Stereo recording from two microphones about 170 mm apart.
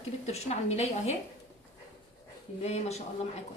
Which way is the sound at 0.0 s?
40° left (ahead or behind).